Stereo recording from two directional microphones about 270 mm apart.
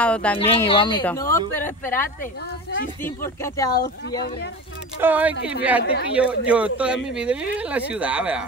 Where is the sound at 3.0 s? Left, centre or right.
Centre.